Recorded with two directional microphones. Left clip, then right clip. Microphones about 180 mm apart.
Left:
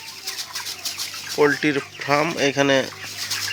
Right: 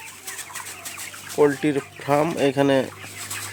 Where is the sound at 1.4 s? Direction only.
15° right (ahead or behind).